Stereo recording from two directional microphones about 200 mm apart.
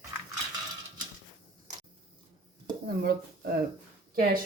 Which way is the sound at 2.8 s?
50° right (ahead or behind).